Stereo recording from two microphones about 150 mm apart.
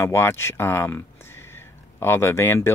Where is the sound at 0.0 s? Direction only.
15° left (ahead or behind).